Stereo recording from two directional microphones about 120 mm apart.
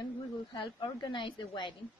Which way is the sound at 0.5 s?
40° left (ahead or behind).